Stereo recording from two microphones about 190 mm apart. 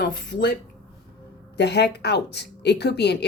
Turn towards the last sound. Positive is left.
turn(degrees=60)  # may be behind; listen again after turning